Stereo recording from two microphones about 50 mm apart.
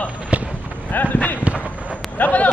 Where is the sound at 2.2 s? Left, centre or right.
Left.